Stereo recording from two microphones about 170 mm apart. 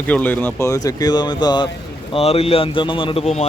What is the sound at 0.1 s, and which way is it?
Speech, 10° left (ahead or behind).